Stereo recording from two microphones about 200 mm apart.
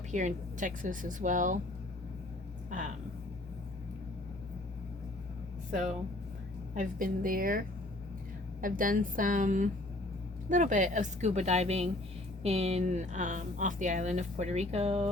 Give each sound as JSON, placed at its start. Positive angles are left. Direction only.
{"t": 0.1, "sound": "speech", "side_deg": -40}
{"t": 2.6, "sound": "speech", "side_deg": -40}
{"t": 6.7, "sound": "a woman's voice", "side_deg": -45}
{"t": 8.6, "sound": "a woman's voice", "side_deg": -45}